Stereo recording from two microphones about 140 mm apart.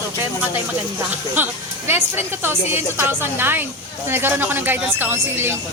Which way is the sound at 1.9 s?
15° right (ahead or behind).